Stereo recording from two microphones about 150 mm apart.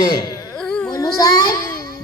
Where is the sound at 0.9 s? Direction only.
25° left (ahead or behind).